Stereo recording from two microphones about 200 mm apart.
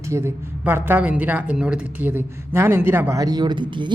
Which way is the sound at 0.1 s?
10° right (ahead or behind).